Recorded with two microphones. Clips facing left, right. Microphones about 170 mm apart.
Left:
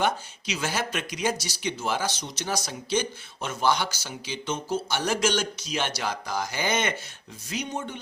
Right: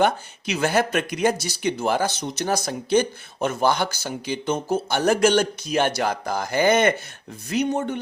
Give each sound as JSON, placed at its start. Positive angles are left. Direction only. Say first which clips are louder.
{"t": 0.0, "sound": "speech", "louder": "right 6 dB", "side_deg": -55}